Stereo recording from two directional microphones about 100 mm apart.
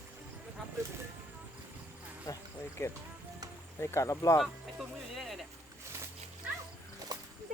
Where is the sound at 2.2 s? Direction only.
30° left (ahead or behind).